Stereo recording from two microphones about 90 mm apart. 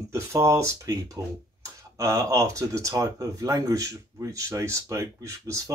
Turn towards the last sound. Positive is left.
turn(degrees=-35)  # may be behind; listen again after turning